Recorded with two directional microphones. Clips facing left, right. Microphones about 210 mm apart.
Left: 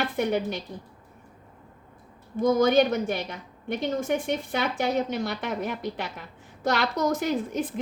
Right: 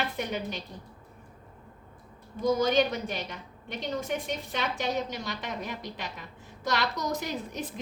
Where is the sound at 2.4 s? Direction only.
50° left (ahead or behind).